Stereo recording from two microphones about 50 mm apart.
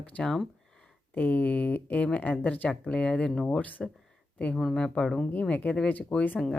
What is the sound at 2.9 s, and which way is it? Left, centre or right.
Speech, left.